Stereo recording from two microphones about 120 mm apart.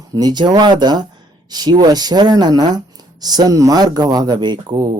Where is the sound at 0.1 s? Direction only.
35° right (ahead or behind).